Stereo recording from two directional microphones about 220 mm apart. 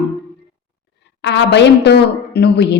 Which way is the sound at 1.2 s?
50° left (ahead or behind).